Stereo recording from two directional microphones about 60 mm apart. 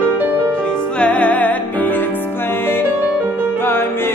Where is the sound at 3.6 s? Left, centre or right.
Left.